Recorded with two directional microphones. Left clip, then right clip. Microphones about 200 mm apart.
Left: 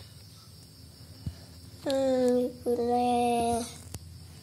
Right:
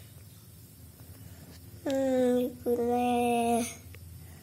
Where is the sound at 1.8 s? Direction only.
10° right (ahead or behind).